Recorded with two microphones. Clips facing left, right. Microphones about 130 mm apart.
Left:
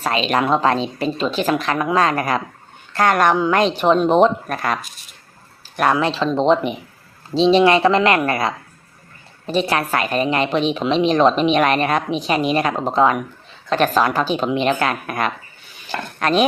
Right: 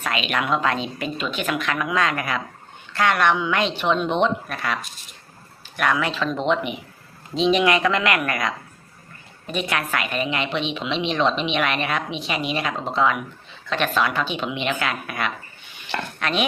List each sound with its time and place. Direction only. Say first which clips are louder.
0.0 s a woman's voice: left 6 dB; 35° left (ahead or behind)